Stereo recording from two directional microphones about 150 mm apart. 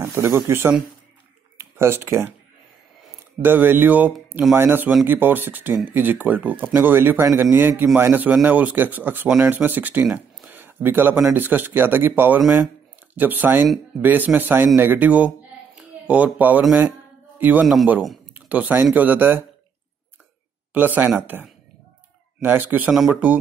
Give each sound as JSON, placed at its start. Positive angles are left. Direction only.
{"t": 0.0, "sound": "speech", "side_deg": -15}
{"t": 3.4, "sound": "speech", "side_deg": -15}
{"t": 10.1, "sound": "a sound", "side_deg": -10}
{"t": 11.2, "sound": "a man's voice", "side_deg": -15}
{"t": 18.3, "sound": "a sound", "side_deg": -10}
{"t": 18.9, "sound": "speech", "side_deg": -10}
{"t": 20.7, "sound": "speech", "side_deg": -10}